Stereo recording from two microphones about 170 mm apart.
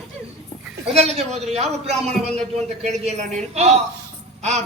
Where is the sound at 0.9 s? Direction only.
40° right (ahead or behind).